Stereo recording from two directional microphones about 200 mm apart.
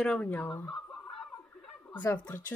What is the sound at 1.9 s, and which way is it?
Speech, 10° left (ahead or behind).